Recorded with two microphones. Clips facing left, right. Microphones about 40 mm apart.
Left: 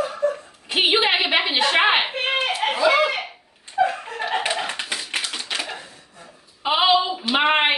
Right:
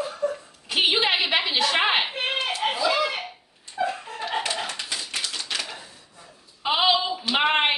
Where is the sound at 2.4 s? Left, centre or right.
Left.